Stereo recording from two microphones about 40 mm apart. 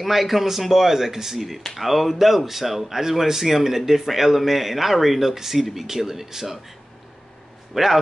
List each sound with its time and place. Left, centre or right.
0.0 s speech: centre
7.7 s a man's voice: centre